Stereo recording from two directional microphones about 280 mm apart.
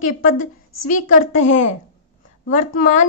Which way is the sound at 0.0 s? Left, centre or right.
Left.